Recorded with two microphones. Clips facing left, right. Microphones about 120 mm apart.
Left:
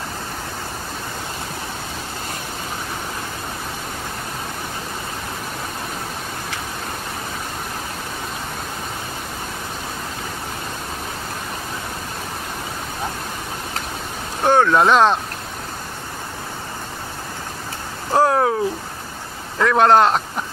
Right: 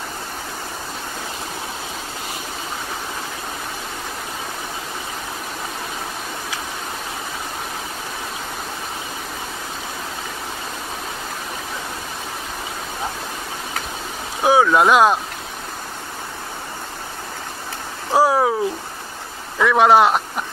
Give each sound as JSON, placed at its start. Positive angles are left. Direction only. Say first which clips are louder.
{"t": 14.4, "sound": "speech", "louder": "even", "side_deg": -5}
{"t": 18.1, "sound": "a sound", "louder": "even", "side_deg": -5}
{"t": 19.6, "sound": "speech", "louder": "even", "side_deg": -5}